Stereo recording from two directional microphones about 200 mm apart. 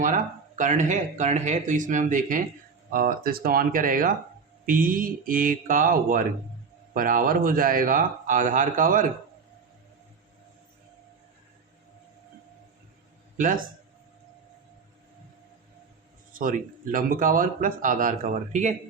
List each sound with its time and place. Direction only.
0.0 s speech: 40° right (ahead or behind)
13.3 s speech: 40° right (ahead or behind)
16.3 s speech: 40° right (ahead or behind)